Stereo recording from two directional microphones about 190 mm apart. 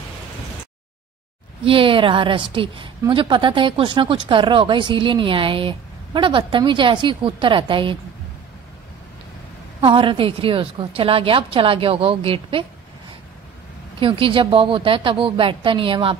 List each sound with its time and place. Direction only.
1.6 s speech: 30° right (ahead or behind)
9.8 s speech: 25° right (ahead or behind)
13.9 s speech: 25° right (ahead or behind)